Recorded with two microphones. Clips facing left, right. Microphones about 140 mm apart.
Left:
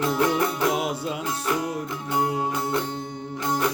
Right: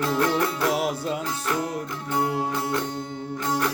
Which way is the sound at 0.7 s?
Centre (ahead or behind).